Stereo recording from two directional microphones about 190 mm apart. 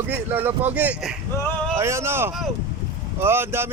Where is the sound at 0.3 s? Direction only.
10° right (ahead or behind).